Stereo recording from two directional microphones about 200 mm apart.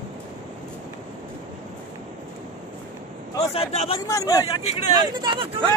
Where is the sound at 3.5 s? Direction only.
30° left (ahead or behind).